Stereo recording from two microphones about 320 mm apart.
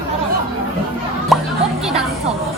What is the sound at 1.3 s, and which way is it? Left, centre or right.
Music, centre.